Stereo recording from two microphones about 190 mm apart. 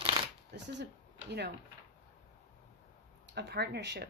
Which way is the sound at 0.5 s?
65° right (ahead or behind).